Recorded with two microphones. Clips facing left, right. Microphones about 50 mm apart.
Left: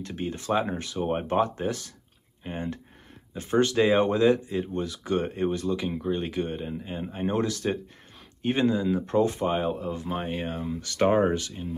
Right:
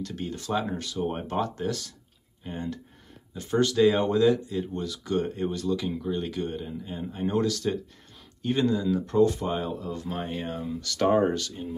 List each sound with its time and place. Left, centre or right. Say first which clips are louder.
0.0 s speech: left 1 dB; left